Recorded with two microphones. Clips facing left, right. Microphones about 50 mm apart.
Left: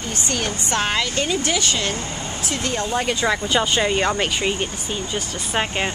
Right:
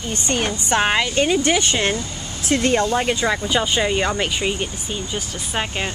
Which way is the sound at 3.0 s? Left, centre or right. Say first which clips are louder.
Right 1 dB; centre.